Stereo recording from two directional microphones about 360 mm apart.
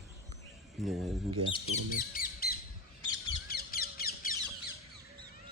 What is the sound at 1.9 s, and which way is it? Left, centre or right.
Speech, left.